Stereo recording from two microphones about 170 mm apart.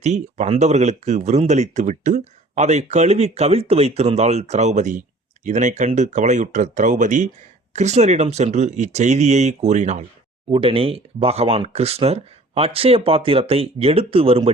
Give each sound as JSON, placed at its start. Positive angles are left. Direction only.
{"t": 0.0, "sound": "speech", "side_deg": -40}